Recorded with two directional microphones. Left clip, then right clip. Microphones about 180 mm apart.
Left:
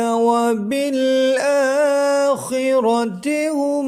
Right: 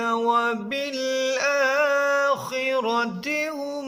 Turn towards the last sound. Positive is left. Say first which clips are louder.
# left 8 dB
turn(degrees=30)  # may be behind; listen again after turning